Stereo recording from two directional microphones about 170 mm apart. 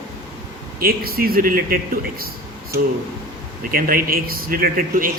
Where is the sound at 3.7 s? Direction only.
55° right (ahead or behind).